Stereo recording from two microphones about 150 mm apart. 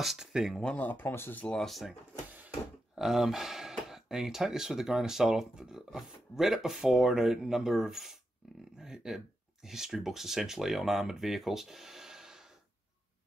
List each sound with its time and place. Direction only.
0.0 s speech: centre (ahead or behind)